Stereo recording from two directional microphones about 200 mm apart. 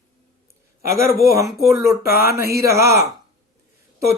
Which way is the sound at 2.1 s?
50° left (ahead or behind).